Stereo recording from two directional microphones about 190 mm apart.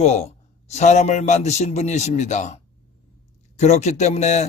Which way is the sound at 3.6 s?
35° left (ahead or behind).